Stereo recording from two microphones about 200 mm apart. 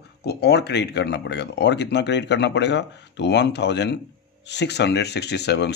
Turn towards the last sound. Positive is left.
turn(degrees=55)  # may be behind; listen again after turning